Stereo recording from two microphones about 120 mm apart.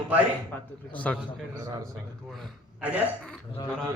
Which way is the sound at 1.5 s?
30° right (ahead or behind).